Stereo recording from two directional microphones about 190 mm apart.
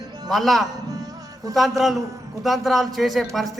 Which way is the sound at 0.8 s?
20° right (ahead or behind).